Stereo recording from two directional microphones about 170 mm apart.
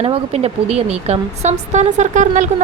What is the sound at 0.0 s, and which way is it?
Speech, 35° right (ahead or behind).